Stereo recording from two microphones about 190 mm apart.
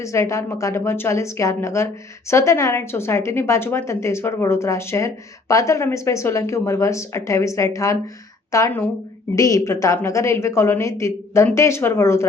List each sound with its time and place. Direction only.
0.0 s a woman's voice: 15° left (ahead or behind)